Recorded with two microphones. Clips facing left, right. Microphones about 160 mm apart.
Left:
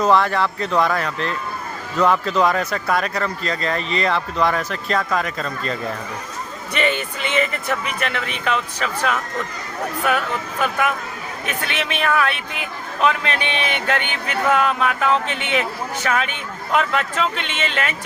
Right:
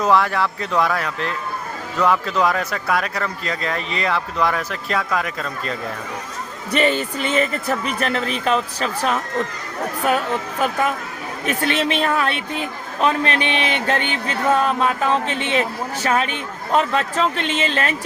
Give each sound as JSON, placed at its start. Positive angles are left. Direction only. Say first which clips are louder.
{"t": 0.0, "sound": "speech", "louder": "left 1 dB", "side_deg": -5}
{"t": 6.7, "sound": "speech", "louder": "right 3 dB", "side_deg": -35}